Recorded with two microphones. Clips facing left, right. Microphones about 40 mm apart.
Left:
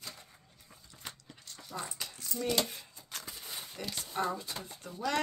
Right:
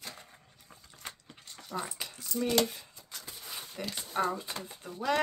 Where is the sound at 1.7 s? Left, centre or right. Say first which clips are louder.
Right 3 dB; right.